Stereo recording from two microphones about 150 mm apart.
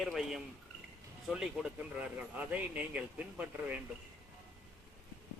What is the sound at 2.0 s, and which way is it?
A man's voice, 10° right (ahead or behind).